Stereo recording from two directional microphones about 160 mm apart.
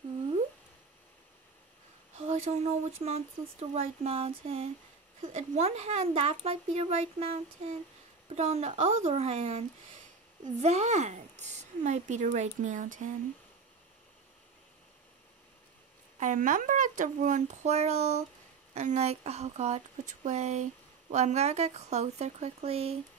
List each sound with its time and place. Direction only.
2.1 s speech: 45° right (ahead or behind)
5.2 s a woman's voice: 50° right (ahead or behind)
16.2 s a woman's voice: 55° right (ahead or behind)